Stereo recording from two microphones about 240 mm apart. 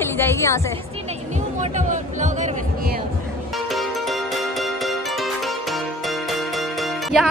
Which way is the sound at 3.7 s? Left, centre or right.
Centre.